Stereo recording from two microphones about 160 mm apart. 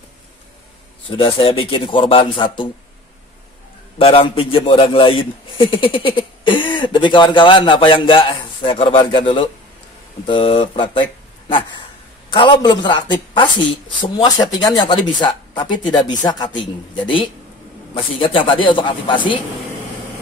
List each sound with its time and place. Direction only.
1.1 s a man's voice: 35° left (ahead or behind)
4.0 s a man's voice: 35° left (ahead or behind)